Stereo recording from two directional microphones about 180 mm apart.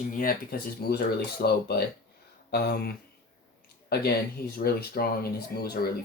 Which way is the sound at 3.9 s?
60° left (ahead or behind).